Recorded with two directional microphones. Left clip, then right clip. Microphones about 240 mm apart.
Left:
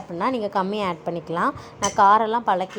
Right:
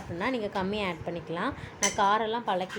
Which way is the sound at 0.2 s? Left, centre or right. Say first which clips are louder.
Left 8 dB; left.